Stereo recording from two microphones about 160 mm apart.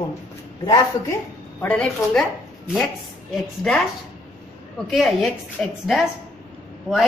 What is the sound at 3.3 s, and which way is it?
Speech, 5° left (ahead or behind).